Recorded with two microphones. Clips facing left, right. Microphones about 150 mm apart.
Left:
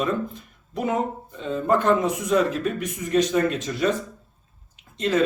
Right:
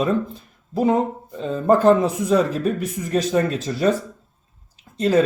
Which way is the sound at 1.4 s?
35° right (ahead or behind).